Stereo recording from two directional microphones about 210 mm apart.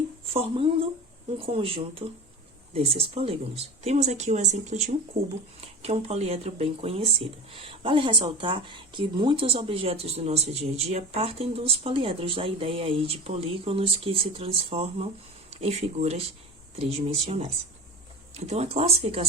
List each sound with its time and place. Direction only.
0.3 s speech: 25° right (ahead or behind)